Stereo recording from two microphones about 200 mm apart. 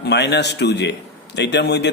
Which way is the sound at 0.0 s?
55° left (ahead or behind).